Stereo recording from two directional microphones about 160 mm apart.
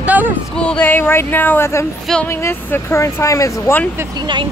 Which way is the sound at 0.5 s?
5° left (ahead or behind).